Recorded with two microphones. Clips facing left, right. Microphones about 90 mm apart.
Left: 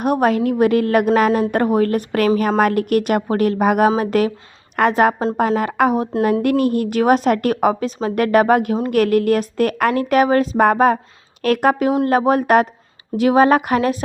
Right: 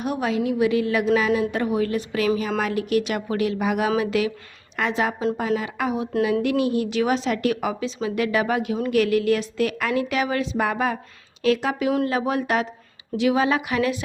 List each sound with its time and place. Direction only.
0.0 s a woman's voice: 55° left (ahead or behind)